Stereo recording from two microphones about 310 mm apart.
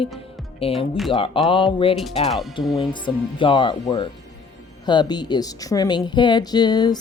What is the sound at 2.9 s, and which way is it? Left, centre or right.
Speech, centre.